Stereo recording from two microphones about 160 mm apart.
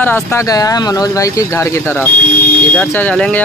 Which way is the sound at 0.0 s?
15° left (ahead or behind).